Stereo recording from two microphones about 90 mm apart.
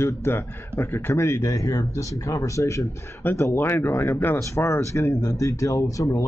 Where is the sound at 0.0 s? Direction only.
30° left (ahead or behind).